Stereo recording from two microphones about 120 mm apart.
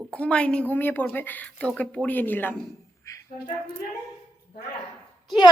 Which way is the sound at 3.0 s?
25° left (ahead or behind).